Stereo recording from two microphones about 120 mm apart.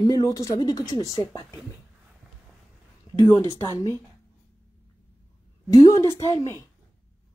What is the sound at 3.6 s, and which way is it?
Speech, 25° left (ahead or behind).